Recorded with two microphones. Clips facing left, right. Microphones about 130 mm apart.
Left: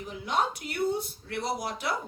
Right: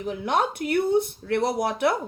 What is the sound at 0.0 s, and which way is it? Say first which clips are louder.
A woman's voice: right 5 dB; 60° right (ahead or behind).